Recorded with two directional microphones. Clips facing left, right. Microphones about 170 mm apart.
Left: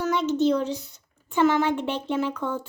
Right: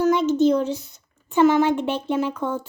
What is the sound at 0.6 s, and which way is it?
Speech, 15° left (ahead or behind).